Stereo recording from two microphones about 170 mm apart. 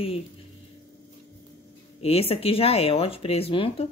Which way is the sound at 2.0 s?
35° left (ahead or behind).